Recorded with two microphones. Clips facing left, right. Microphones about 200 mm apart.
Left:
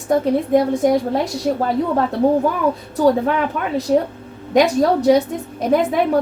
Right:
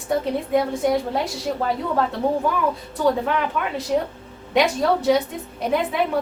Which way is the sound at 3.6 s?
40° left (ahead or behind).